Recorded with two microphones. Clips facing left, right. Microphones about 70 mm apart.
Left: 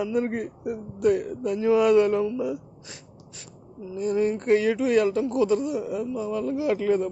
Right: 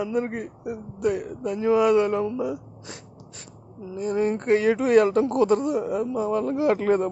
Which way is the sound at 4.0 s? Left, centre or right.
Right.